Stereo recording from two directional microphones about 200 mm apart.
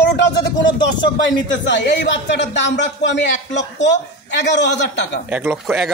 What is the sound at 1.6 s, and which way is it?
A man's voice, 60° left (ahead or behind).